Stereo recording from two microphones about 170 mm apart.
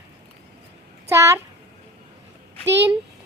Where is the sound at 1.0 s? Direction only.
15° right (ahead or behind).